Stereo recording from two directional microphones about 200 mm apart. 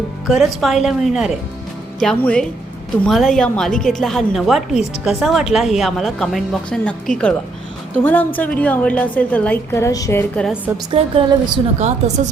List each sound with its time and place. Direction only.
0.3 s a woman's voice: centre (ahead or behind)
10.9 s speech: 25° right (ahead or behind)
11.8 s speech: 35° right (ahead or behind)